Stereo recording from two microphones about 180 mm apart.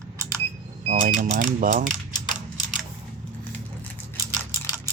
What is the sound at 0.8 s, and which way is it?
Speech, 40° right (ahead or behind).